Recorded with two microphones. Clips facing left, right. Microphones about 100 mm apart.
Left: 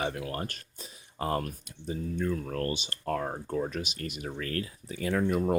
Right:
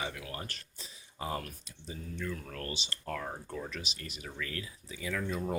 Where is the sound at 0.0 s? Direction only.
45° left (ahead or behind).